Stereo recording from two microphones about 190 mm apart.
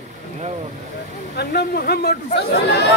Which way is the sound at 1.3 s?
60° left (ahead or behind).